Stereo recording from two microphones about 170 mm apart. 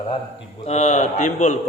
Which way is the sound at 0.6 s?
40° left (ahead or behind).